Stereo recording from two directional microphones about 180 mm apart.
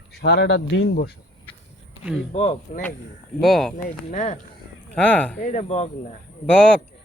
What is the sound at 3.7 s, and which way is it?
Speech, 40° left (ahead or behind).